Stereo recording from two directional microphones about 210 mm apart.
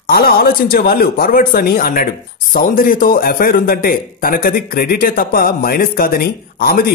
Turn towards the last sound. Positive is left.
turn(degrees=45)  # may be behind; listen again after turning